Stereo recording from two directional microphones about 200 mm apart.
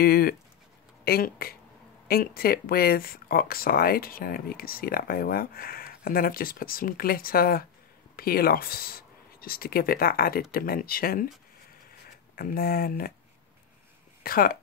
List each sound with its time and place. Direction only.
0.0 s speech: 50° left (ahead or behind)
12.4 s speech: 50° left (ahead or behind)
14.2 s speech: 45° left (ahead or behind)